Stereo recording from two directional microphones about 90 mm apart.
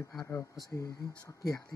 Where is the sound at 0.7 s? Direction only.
40° left (ahead or behind).